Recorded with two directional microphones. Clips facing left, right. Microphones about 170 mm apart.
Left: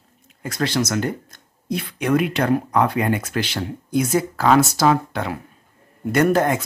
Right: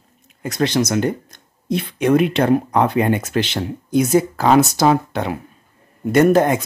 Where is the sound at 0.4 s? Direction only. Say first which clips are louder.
Right 4 dB; 20° right (ahead or behind).